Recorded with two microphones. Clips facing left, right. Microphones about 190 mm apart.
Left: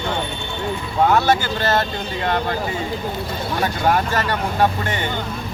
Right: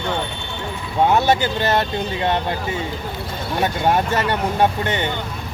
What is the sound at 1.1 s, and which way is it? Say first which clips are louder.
Speech: right 1 dB; 20° right (ahead or behind).